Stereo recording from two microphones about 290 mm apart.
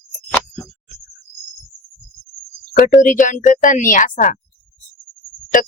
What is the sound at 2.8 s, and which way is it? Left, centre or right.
Speech, left.